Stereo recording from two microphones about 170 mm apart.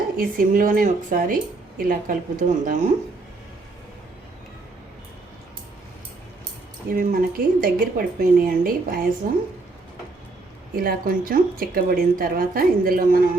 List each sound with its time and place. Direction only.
0.2 s speech: 55° right (ahead or behind)
6.8 s speech: 55° right (ahead or behind)
10.8 s speech: 60° right (ahead or behind)